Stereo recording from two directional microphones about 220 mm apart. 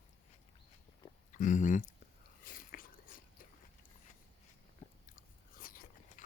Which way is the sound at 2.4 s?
40° left (ahead or behind).